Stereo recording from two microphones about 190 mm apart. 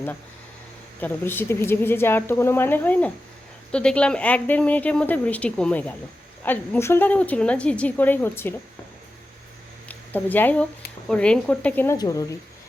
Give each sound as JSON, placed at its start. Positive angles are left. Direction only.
{"t": 0.9, "sound": "a woman's voice", "side_deg": 10}
{"t": 9.9, "sound": "a woman's voice", "side_deg": 10}
{"t": 11.9, "sound": "speech", "side_deg": 20}